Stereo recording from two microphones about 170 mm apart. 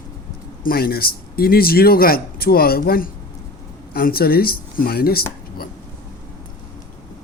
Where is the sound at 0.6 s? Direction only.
60° left (ahead or behind).